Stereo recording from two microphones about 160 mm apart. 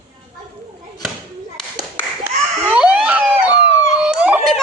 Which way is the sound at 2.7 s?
5° right (ahead or behind).